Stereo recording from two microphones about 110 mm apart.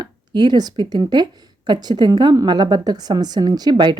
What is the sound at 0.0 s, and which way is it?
Speech, 40° right (ahead or behind).